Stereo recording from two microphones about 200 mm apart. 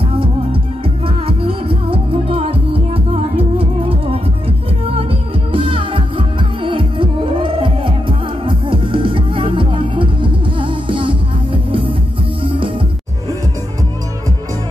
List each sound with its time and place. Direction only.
0.0 s music: 25° right (ahead or behind)